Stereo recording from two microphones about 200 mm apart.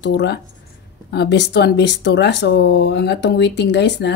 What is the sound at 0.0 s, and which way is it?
Speech, 55° left (ahead or behind).